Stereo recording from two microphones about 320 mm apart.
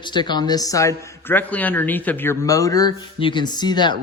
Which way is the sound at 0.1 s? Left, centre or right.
Centre.